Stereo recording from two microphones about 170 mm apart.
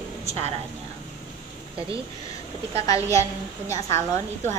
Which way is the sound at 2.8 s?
20° left (ahead or behind).